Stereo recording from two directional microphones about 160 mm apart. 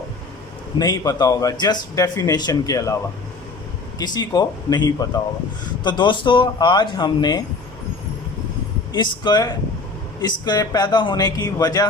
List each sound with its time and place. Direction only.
0.8 s a man's voice: 25° left (ahead or behind)
8.9 s a man's voice: 30° left (ahead or behind)